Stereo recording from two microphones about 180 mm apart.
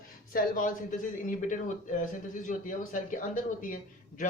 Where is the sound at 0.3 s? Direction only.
50° left (ahead or behind).